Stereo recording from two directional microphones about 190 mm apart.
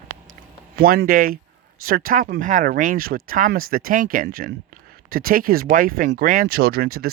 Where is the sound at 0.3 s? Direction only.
45° right (ahead or behind).